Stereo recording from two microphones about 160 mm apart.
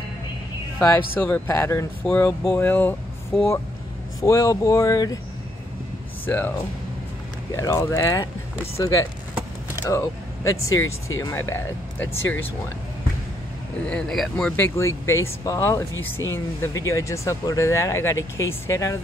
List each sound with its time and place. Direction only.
0.7 s speech: 10° left (ahead or behind)
6.2 s speech: 10° left (ahead or behind)
7.5 s speech: 15° left (ahead or behind)
13.8 s speech: 5° left (ahead or behind)
14.6 s speech: 15° left (ahead or behind)